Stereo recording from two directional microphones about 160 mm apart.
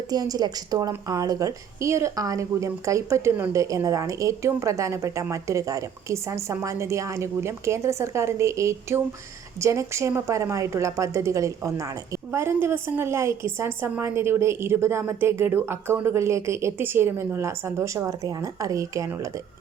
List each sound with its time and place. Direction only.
0.1 s a woman's voice: 25° right (ahead or behind)